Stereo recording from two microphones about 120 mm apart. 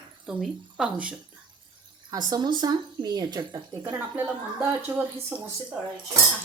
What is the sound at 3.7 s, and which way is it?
Speech, 25° right (ahead or behind).